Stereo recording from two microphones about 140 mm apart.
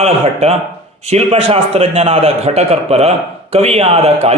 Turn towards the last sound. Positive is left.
turn(degrees=-45)  # may be behind; listen again after turning